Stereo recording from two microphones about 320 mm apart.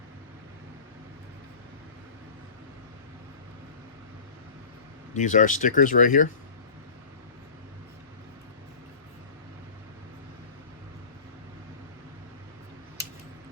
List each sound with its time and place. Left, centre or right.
5.1 s speech: left